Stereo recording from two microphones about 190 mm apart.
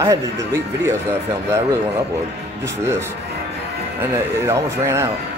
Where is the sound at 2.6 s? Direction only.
15° right (ahead or behind).